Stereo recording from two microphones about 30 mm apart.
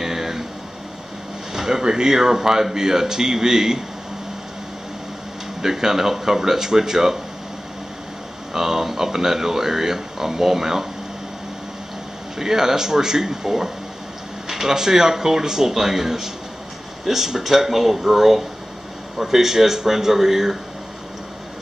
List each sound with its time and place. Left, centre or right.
0.0 s a sound: centre
1.5 s speech: centre
5.6 s speech: centre
8.5 s speech: centre
12.4 s speech: centre